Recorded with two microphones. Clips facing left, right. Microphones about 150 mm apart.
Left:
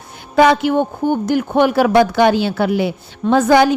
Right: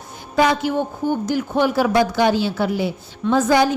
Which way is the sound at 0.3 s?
65° left (ahead or behind).